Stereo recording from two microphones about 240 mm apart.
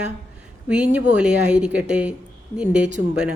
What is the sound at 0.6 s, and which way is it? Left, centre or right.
Speech, centre.